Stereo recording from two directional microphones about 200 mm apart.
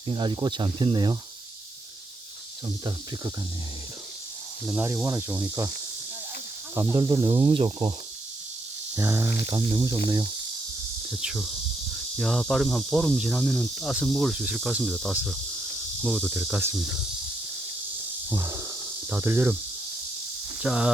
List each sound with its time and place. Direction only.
0.1 s speech: 25° right (ahead or behind)
2.6 s speech: 20° right (ahead or behind)
4.6 s cricket: 10° right (ahead or behind)
6.7 s speech: 20° right (ahead or behind)
9.0 s cricket: 15° right (ahead or behind)
9.5 s speech: 25° right (ahead or behind)
11.1 s cricket: 5° right (ahead or behind)
18.3 s snake: 10° right (ahead or behind)
19.1 s cricket: 10° right (ahead or behind)
20.6 s speech: 5° right (ahead or behind)